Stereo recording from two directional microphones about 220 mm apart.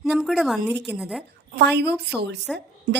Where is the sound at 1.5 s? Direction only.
50° right (ahead or behind).